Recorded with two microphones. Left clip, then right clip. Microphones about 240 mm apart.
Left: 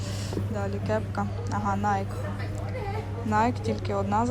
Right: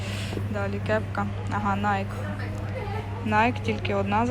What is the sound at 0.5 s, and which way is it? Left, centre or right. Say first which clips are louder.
Speech: right 3 dB; centre.